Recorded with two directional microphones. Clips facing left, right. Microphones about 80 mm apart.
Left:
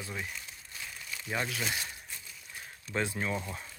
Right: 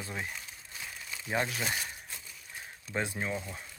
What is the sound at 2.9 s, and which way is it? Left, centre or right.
Speech, centre.